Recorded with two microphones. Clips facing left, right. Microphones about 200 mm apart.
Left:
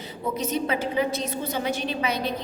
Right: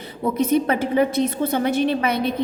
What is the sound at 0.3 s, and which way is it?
A woman's voice, 55° right (ahead or behind).